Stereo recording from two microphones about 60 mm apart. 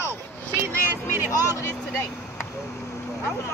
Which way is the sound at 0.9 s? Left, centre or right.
Right.